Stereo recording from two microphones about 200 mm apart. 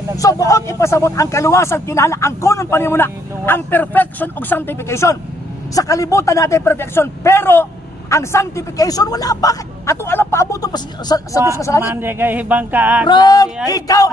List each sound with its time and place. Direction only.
0.2 s speech: 15° left (ahead or behind)
11.8 s speech: 10° right (ahead or behind)
13.0 s speech: 20° left (ahead or behind)